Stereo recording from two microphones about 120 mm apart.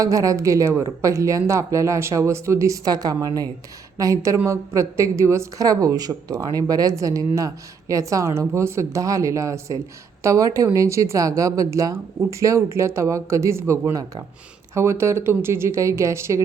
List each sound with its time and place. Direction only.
0.0 s a woman's voice: 25° right (ahead or behind)